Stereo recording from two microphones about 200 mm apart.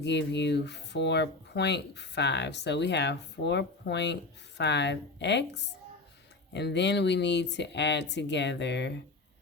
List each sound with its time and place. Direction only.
0.0 s speech: 60° left (ahead or behind)